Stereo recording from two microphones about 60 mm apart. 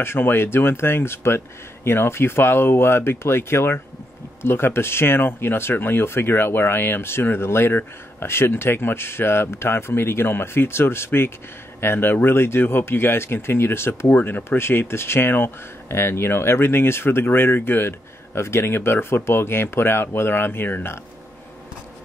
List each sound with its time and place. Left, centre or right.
0.0 s speech: left
14.1 s speech: left